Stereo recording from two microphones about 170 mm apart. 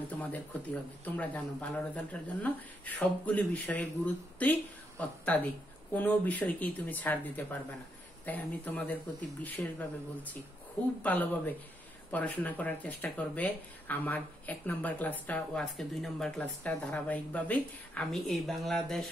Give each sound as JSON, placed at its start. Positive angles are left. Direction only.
{"t": 1.0, "sound": "a woman's voice", "side_deg": 10}